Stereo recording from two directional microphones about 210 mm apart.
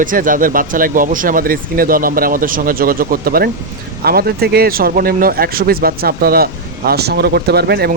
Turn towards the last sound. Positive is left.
turn(degrees=-50)  # may be behind; listen again after turning